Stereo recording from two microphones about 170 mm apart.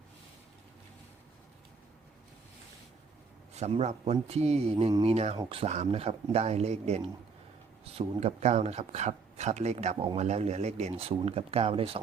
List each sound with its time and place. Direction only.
3.5 s speech: 40° right (ahead or behind)